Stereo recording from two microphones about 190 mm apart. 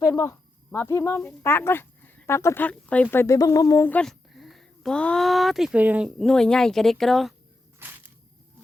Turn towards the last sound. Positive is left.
turn(degrees=0)  # may be behind; listen again after turning